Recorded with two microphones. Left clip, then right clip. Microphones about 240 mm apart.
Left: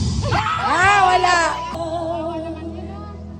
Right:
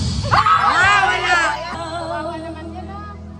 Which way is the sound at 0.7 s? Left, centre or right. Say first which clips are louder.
Even; centre.